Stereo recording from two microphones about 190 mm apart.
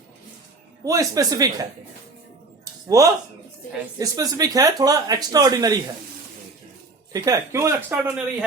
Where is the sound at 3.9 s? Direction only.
20° right (ahead or behind).